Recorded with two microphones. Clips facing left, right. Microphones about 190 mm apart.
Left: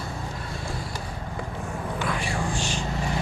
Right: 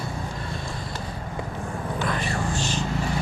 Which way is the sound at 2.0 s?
10° left (ahead or behind).